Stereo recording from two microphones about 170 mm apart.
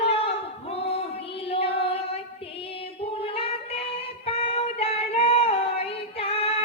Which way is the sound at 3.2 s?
35° left (ahead or behind).